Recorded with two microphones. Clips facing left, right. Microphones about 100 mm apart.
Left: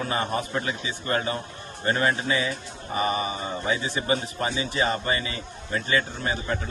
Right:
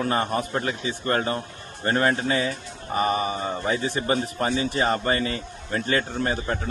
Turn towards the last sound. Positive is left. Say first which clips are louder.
# right 3 dB
turn(degrees=-45)  # may be behind; listen again after turning